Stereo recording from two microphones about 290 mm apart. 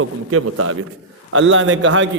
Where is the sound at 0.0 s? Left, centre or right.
Right.